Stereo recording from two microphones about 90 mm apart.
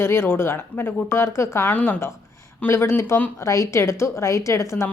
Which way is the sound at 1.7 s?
15° left (ahead or behind).